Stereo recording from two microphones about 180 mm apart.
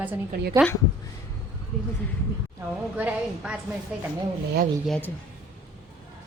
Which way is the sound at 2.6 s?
10° right (ahead or behind).